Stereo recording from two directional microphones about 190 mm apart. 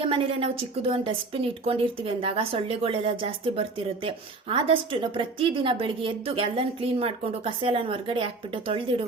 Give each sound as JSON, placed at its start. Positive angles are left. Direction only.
{"t": 0.0, "sound": "speech", "side_deg": -30}